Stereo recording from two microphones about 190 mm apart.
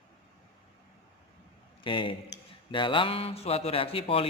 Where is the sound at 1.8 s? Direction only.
25° left (ahead or behind).